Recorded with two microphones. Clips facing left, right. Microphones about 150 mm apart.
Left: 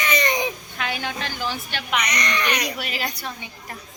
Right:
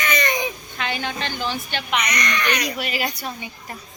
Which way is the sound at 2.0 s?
30° left (ahead or behind).